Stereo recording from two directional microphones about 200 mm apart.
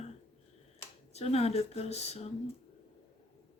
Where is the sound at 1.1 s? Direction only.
30° left (ahead or behind).